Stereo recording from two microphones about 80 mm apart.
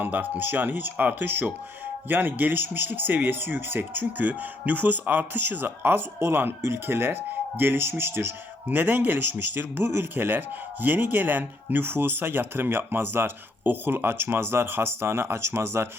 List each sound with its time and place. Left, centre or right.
0.0 s speech: right